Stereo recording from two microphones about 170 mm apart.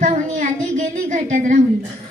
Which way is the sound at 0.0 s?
45° right (ahead or behind).